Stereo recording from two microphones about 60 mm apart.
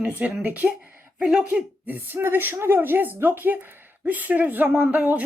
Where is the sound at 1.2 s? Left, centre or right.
Centre.